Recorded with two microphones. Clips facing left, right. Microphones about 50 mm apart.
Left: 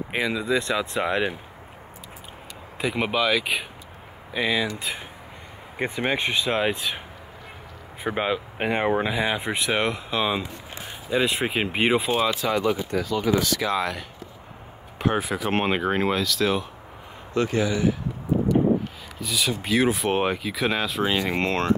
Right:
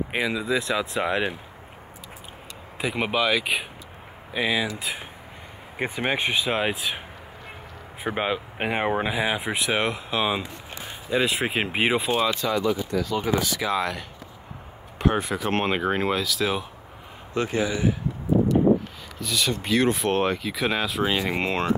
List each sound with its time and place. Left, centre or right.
0.1 s speech: centre
2.8 s speech: centre
8.0 s speech: centre
12.3 s speech: left
13.3 s speech: centre
17.3 s speech: centre
19.1 s speech: centre